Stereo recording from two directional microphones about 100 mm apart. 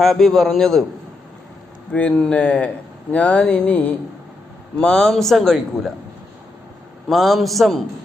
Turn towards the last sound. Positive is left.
turn(degrees=0)  # may be behind; listen again after turning